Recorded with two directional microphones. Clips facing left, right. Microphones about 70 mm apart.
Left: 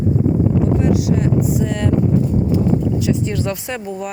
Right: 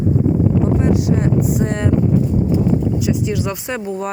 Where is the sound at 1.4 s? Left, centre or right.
Right.